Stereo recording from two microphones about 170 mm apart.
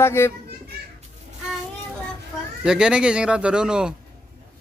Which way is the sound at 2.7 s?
5° right (ahead or behind).